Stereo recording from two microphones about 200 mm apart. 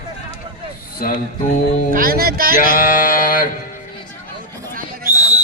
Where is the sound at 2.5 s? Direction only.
45° left (ahead or behind).